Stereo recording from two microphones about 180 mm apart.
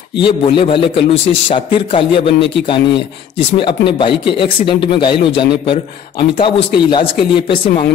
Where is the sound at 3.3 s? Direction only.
30° left (ahead or behind).